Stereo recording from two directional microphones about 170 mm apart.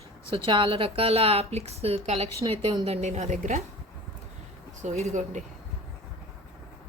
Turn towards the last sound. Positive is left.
turn(degrees=-40)  # may be behind; listen again after turning